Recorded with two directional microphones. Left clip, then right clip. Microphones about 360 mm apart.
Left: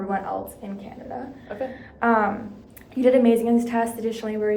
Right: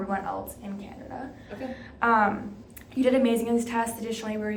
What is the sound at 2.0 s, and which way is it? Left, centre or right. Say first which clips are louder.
A woman's voice: left 1 dB; centre.